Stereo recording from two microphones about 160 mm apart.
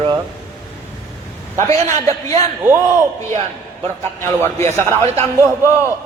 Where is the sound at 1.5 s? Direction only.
50° right (ahead or behind).